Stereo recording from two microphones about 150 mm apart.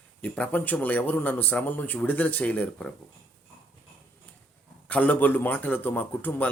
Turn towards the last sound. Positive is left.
turn(degrees=10)  # may be behind; listen again after turning